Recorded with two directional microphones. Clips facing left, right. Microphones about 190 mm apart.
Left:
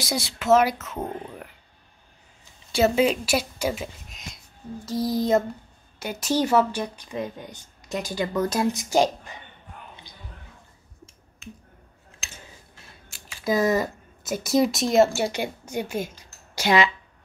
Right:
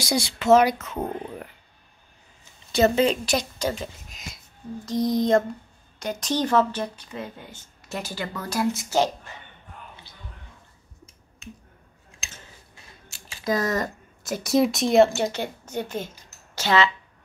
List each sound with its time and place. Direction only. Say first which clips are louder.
0.0 s speech: right 3 dB; centre (ahead or behind)
2.7 s speech: even; 5° left (ahead or behind)
13.4 s speech: left 3 dB; 10° left (ahead or behind)